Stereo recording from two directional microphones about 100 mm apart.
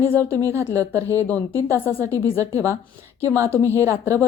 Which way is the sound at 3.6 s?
30° right (ahead or behind).